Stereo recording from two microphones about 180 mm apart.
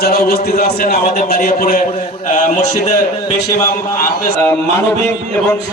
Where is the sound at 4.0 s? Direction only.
55° left (ahead or behind).